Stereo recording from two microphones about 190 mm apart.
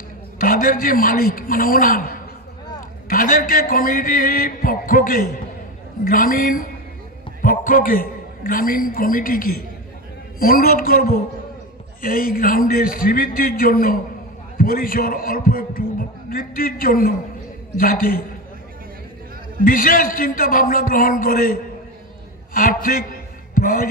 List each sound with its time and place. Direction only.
0.4 s a man's voice: 50° left (ahead or behind)
19.6 s a man's voice: 45° left (ahead or behind)